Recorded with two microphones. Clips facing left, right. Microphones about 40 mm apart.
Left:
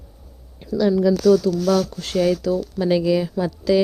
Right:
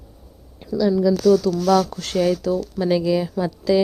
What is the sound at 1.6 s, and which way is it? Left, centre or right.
Speech, centre.